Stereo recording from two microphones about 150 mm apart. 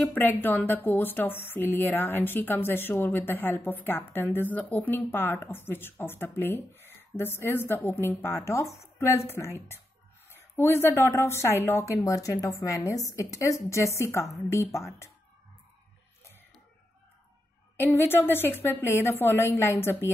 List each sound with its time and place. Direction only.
0.0 s a woman's voice: 10° left (ahead or behind)
17.7 s speech: 15° left (ahead or behind)